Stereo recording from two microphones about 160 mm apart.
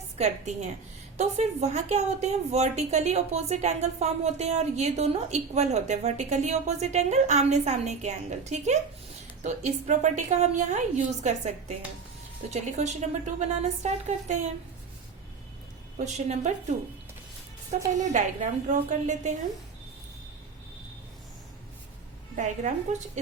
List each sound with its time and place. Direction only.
0.2 s speech: 45° right (ahead or behind)
16.0 s speech: 45° right (ahead or behind)
17.7 s speech: 50° right (ahead or behind)
22.4 s speech: 50° right (ahead or behind)